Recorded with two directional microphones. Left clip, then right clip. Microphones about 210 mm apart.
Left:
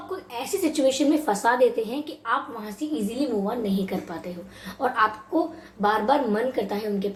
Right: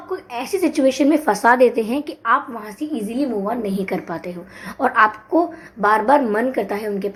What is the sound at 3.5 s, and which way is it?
A woman's voice, 35° right (ahead or behind).